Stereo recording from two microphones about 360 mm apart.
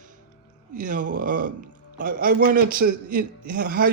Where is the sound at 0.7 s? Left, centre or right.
Right.